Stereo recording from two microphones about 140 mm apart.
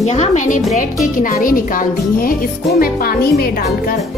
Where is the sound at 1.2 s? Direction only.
85° left.